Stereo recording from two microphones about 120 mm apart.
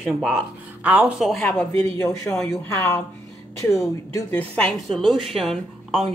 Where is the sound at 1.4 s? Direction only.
20° left (ahead or behind).